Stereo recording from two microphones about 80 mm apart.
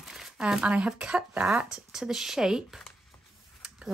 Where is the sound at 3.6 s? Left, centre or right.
Centre.